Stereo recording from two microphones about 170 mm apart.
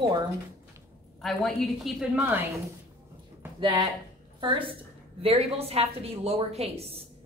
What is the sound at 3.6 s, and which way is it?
A woman's voice, 20° right (ahead or behind).